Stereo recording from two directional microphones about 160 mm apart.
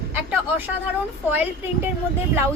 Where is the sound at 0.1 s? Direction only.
10° right (ahead or behind).